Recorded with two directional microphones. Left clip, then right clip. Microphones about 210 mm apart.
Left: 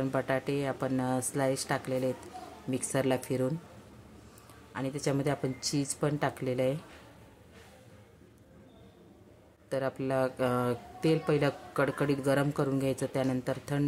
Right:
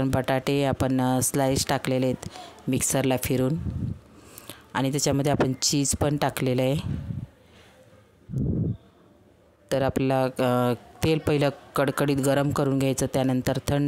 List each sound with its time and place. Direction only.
0.0 s speech: 50° right (ahead or behind)
4.7 s speech: 50° right (ahead or behind)
9.7 s speech: 45° right (ahead or behind)